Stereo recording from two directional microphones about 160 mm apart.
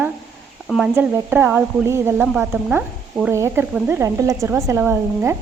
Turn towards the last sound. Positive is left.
turn(degrees=-15)  # may be behind; listen again after turning